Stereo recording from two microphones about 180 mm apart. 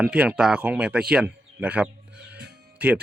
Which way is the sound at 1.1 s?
5° right (ahead or behind).